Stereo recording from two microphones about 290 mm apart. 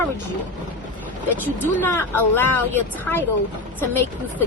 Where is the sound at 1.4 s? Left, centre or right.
Centre.